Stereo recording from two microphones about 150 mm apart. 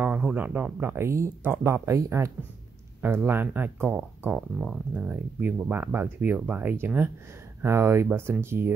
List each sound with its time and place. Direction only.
0.0 s speech: 10° right (ahead or behind)